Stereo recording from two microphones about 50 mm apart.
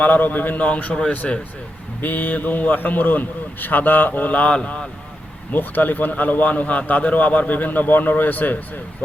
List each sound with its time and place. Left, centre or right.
0.0 s a man's voice: left
1.2 s speech: centre
2.0 s a man's voice: left
5.5 s a man's voice: left